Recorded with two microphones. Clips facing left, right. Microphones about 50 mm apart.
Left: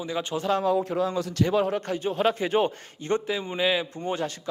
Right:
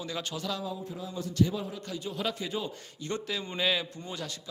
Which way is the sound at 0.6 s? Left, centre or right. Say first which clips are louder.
Left 13 dB; left.